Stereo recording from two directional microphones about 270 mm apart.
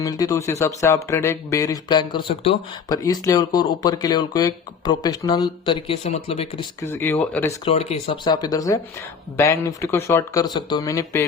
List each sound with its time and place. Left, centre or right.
0.0 s speech: centre
6.8 s speech: centre
7.6 s speech: left